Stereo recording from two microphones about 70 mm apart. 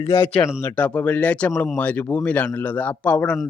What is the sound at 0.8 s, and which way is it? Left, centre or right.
Speech, left.